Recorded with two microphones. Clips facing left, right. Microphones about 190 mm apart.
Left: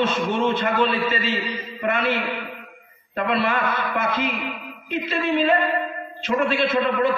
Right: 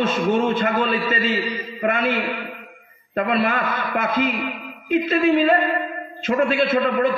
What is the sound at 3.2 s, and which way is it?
A man's voice, 50° right (ahead or behind).